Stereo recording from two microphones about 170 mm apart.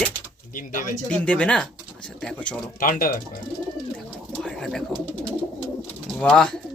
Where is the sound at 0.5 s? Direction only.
50° left (ahead or behind).